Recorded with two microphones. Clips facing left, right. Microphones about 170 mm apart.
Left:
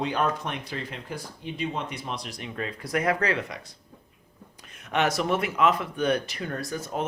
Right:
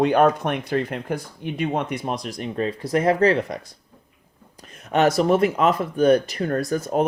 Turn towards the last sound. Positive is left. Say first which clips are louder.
# right 9 dB
turn(degrees=-40)  # may be behind; listen again after turning